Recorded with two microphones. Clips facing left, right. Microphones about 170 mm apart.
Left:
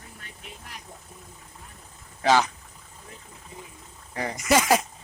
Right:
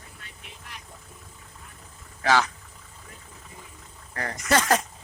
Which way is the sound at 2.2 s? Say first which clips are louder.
Left 2 dB; 20° left (ahead or behind).